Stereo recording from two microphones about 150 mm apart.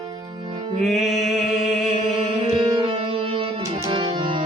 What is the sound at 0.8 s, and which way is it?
Speech, centre (ahead or behind).